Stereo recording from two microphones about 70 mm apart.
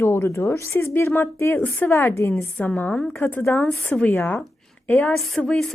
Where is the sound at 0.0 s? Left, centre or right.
Left.